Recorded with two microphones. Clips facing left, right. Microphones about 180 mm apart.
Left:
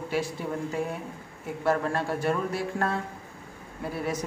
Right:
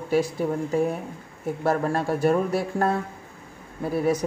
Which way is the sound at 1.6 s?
40° right (ahead or behind).